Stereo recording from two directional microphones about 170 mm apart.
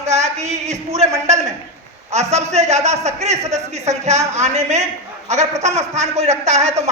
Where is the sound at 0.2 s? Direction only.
40° right (ahead or behind).